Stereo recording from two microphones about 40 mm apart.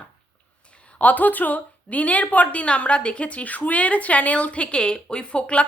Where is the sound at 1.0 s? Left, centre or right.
Left.